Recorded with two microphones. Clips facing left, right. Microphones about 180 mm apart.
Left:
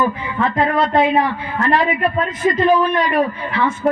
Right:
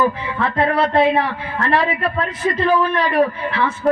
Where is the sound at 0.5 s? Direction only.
15° left (ahead or behind).